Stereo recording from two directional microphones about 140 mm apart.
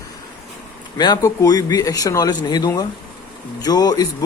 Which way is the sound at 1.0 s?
25° left (ahead or behind).